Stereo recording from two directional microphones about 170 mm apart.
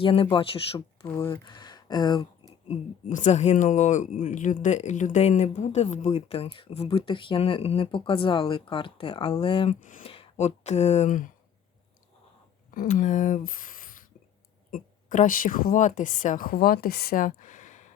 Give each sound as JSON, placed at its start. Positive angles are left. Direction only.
{"t": 0.0, "sound": "speech", "side_deg": 30}
{"t": 1.0, "sound": "speech", "side_deg": 10}
{"t": 1.3, "sound": "speech", "side_deg": 25}
{"t": 2.6, "sound": "speech", "side_deg": 45}
{"t": 12.7, "sound": "a woman's voice", "side_deg": 55}